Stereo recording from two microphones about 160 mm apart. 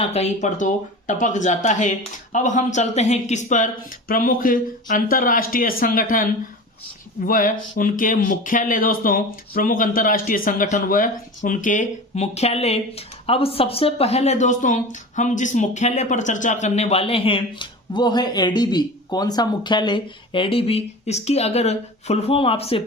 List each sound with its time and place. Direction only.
0.0 s speech: 40° left (ahead or behind)
4.1 s speech: 60° left (ahead or behind); by 22.8 s 35° left (ahead or behind)